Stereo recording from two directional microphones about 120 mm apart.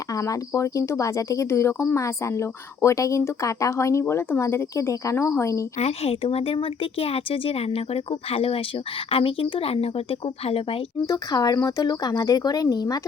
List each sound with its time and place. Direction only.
0.1 s speech: 25° left (ahead or behind)
5.7 s speech: 60° left (ahead or behind)
11.0 s speech: 30° left (ahead or behind)